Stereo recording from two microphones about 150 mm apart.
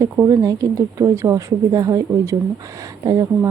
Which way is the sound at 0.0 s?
20° right (ahead or behind).